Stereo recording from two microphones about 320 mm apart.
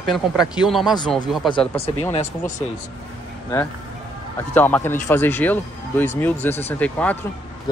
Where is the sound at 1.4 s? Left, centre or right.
Centre.